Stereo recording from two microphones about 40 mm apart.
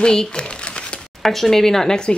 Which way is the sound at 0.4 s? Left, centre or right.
Left.